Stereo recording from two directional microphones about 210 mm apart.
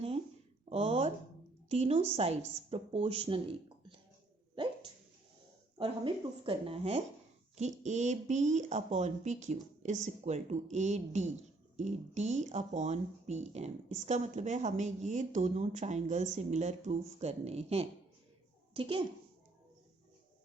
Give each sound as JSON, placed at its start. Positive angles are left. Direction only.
{"t": 0.7, "sound": "speech", "side_deg": -30}
{"t": 6.4, "sound": "speech", "side_deg": -25}